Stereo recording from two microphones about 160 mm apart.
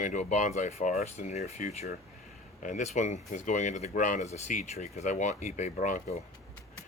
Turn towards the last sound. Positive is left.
turn(degrees=55)  # may be behind; listen again after turning